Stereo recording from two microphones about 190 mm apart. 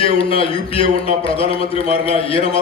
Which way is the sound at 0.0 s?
30° left (ahead or behind).